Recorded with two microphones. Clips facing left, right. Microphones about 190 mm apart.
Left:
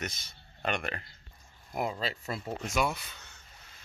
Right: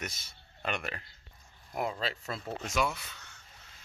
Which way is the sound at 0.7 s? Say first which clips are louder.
Left 3 dB; 5° right (ahead or behind).